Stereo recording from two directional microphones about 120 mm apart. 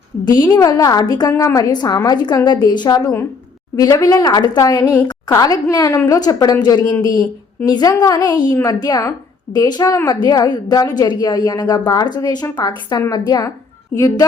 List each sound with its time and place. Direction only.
0.3 s a woman's voice: 35° left (ahead or behind)
3.0 s a woman's voice: 20° left (ahead or behind)